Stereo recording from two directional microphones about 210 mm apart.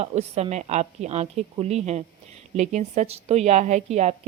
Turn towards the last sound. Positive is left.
turn(degrees=-30)  # may be behind; listen again after turning